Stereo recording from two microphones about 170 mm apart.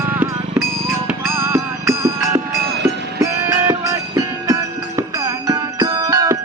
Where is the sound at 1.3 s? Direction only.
15° right (ahead or behind).